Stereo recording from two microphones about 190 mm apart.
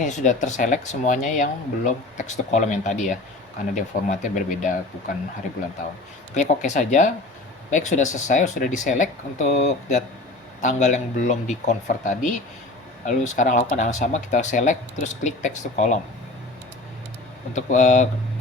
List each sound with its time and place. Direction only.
0.0 s speech: 40° left (ahead or behind)
6.3 s speech: 40° left (ahead or behind)
17.5 s speech: 40° left (ahead or behind)